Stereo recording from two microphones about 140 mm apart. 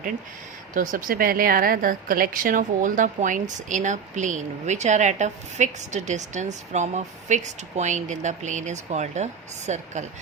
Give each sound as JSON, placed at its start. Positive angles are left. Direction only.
{"t": 0.7, "sound": "a woman's voice", "side_deg": -75}